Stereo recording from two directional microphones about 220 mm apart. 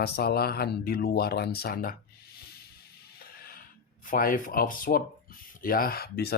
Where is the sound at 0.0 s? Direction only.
45° left (ahead or behind).